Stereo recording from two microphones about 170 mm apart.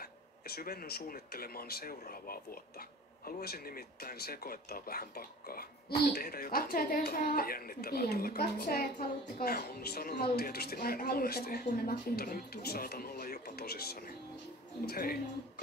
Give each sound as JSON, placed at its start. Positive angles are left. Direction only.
{"t": 0.0, "sound": "speech", "side_deg": 65}